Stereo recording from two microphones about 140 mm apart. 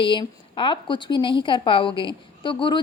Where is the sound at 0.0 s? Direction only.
35° left (ahead or behind).